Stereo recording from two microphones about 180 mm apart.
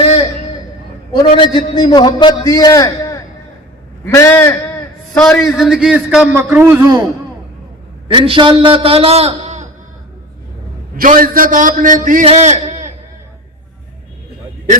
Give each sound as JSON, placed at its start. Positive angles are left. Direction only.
{"t": 1.1, "sound": "a man's voice", "side_deg": 25}
{"t": 8.0, "sound": "a man's voice", "side_deg": -30}
{"t": 10.9, "sound": "a man's voice", "side_deg": -50}